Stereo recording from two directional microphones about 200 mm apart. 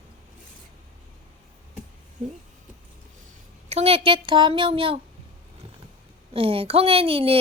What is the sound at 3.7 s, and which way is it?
A child's voice, 30° right (ahead or behind).